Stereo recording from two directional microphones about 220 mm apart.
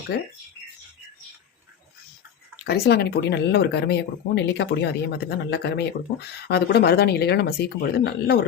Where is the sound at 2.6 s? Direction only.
45° left (ahead or behind).